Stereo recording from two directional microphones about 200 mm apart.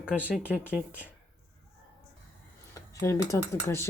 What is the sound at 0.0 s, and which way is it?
Speech, 5° right (ahead or behind).